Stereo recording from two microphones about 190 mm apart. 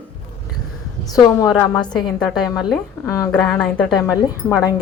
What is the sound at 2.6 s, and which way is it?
Speech, centre (ahead or behind).